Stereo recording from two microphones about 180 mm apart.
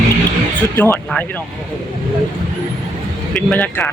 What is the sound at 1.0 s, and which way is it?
Speech, 5° left (ahead or behind).